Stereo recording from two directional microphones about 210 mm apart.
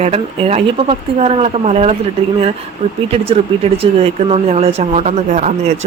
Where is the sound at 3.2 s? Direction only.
30° right (ahead or behind).